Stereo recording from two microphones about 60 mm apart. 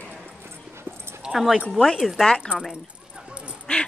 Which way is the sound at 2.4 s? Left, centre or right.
Centre.